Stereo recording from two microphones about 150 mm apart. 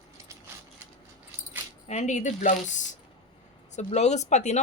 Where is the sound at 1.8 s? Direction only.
50° left (ahead or behind).